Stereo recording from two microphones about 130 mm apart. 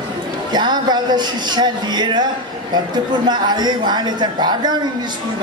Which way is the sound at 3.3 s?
35° right (ahead or behind).